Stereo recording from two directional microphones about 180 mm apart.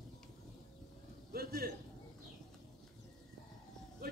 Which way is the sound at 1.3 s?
60° right (ahead or behind).